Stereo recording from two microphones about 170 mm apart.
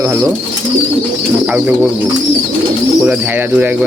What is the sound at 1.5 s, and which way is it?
Speech, 10° right (ahead or behind).